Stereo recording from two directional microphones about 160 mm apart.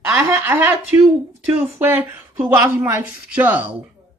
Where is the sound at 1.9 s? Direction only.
10° right (ahead or behind).